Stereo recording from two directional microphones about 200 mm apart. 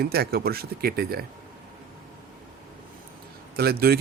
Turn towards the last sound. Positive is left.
turn(degrees=-50)  # may be behind; listen again after turning